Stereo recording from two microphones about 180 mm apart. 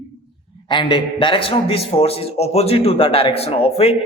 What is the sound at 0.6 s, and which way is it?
A man's voice, 25° left (ahead or behind).